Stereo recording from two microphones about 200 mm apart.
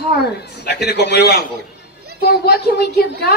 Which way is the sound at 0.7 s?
55° left (ahead or behind).